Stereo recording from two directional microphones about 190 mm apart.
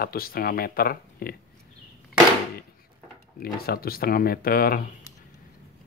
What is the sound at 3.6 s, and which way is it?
Speech, 50° left (ahead or behind).